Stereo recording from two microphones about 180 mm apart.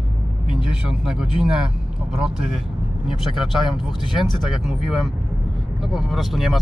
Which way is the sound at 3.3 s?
Centre (ahead or behind).